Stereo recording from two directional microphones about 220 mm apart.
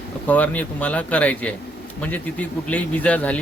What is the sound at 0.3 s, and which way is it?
Speech, 5° left (ahead or behind).